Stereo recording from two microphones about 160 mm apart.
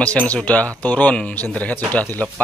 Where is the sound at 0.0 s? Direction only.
10° left (ahead or behind).